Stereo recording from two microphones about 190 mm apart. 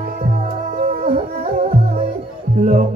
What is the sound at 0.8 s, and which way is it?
Music, 45° right (ahead or behind).